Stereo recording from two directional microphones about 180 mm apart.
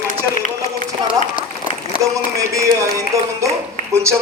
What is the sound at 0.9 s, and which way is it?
A man's voice, 20° right (ahead or behind).